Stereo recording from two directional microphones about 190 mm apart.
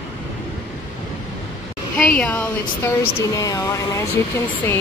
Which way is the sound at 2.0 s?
10° left (ahead or behind).